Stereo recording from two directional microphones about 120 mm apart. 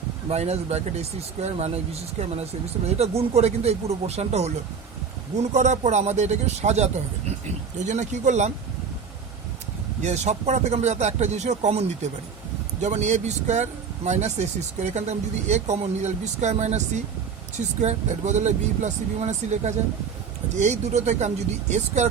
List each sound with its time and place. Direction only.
0.3 s speech: 65° right (ahead or behind)
7.9 s speech: 80° right
10.0 s speech: 70° right (ahead or behind)